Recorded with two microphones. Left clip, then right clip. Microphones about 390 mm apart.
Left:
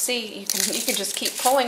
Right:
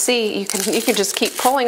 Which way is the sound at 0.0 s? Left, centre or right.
Right.